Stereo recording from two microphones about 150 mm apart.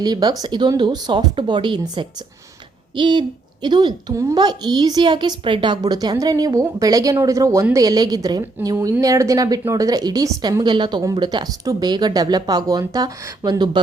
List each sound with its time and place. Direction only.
0.0 s a child's voice: 25° right (ahead or behind)